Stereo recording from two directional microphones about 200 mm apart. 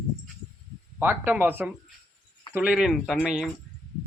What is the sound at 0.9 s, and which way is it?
Speech, 10° right (ahead or behind).